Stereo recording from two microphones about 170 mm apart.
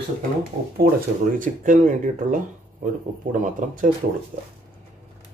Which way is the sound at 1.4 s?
50° right (ahead or behind).